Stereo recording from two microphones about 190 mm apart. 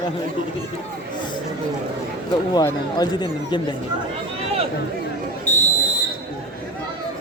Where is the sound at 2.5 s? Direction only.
20° left (ahead or behind).